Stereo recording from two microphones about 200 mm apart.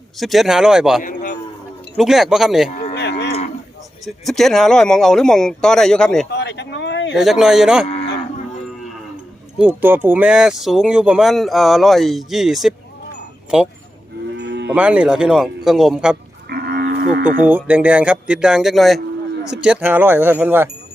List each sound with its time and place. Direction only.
0.2 s speech: centre (ahead or behind)
1.0 s a sound: 40° left (ahead or behind)
2.0 s speech: centre (ahead or behind)
2.6 s a sound: 40° left (ahead or behind)
2.9 s cattle: 55° left (ahead or behind)
4.0 s speech: centre (ahead or behind)
6.3 s a sound: 60° left (ahead or behind)
7.2 s speech: centre (ahead or behind)
9.6 s speech: 10° right (ahead or behind)
14.3 s moo: 60° right (ahead or behind)
14.7 s speech: 5° right (ahead or behind)
16.5 s cattle: 50° right (ahead or behind)
17.7 s speech: 5° right (ahead or behind)